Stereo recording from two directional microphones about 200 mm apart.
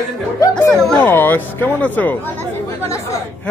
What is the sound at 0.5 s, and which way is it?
Speech, 5° left (ahead or behind).